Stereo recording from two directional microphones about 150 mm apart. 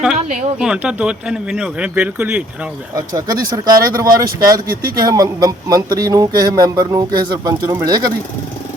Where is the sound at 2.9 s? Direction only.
25° right (ahead or behind).